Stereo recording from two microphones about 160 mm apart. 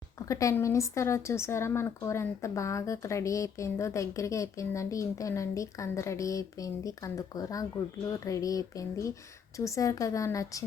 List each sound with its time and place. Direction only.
0.3 s speech: 20° left (ahead or behind)